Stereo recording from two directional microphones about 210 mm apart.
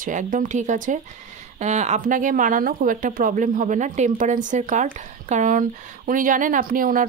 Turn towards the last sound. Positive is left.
turn(degrees=-40)  # may be behind; listen again after turning